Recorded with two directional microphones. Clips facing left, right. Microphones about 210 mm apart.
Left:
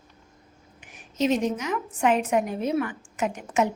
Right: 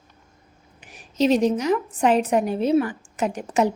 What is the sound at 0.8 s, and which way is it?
A woman's voice, 35° right (ahead or behind).